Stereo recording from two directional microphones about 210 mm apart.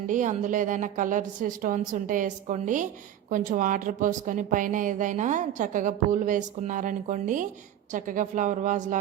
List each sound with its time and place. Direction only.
0.1 s a woman's voice: 35° right (ahead or behind)